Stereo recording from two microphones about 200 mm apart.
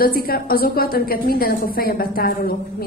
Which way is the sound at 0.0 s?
45° left (ahead or behind).